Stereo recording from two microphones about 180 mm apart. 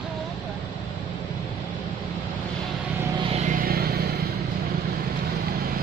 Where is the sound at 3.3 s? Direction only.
45° right (ahead or behind); by 4.0 s 60° right (ahead or behind).